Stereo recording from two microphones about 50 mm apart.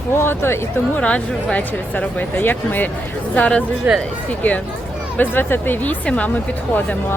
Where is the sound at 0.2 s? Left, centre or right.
Left.